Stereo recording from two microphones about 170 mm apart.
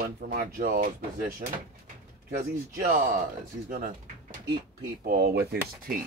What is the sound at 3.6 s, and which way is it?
Speech, 55° right (ahead or behind).